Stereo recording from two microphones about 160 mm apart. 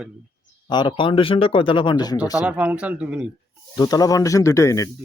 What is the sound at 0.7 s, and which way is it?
Speech, 30° left (ahead or behind).